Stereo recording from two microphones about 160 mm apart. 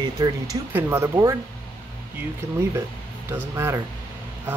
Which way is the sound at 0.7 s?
15° right (ahead or behind).